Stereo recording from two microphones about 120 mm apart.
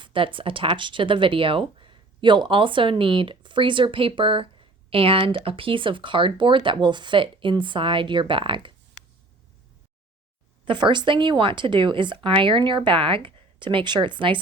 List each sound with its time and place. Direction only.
0.0 s speech: 45° right (ahead or behind)
10.7 s speech: 40° right (ahead or behind)